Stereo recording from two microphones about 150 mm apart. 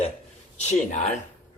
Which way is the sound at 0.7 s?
50° left (ahead or behind).